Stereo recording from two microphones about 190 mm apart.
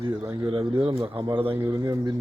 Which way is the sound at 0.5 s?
25° right (ahead or behind).